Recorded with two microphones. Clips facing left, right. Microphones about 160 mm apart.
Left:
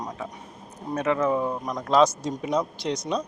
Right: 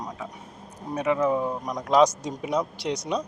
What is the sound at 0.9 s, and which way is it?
A man's voice, 15° right (ahead or behind).